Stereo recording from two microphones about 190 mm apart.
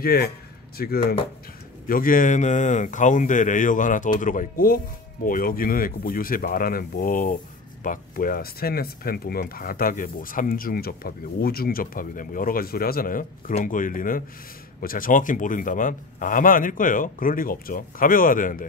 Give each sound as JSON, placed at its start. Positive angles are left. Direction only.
{"t": 0.0, "sound": "speech", "side_deg": 55}